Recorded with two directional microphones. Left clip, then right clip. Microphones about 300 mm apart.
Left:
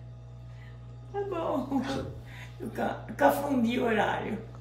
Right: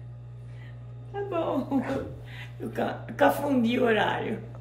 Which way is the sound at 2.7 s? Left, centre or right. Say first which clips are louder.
Right 2 dB; centre.